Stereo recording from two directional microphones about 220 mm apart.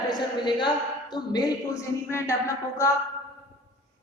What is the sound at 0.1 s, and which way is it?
A woman's voice, 20° left (ahead or behind).